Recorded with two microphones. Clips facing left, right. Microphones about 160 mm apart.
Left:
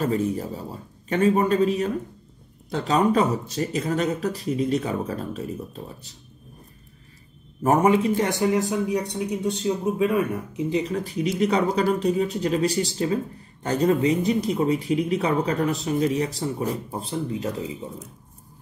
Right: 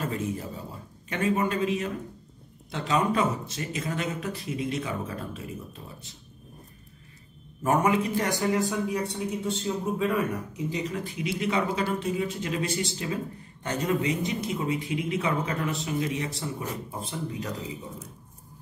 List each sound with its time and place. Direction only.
1.0 s speech: 35° left (ahead or behind)
7.6 s a man's voice: 30° left (ahead or behind)
10.7 s a man's voice: 35° left (ahead or behind)